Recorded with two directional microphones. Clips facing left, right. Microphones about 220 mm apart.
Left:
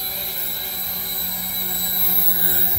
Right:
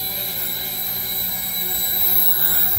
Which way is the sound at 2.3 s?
20° left (ahead or behind).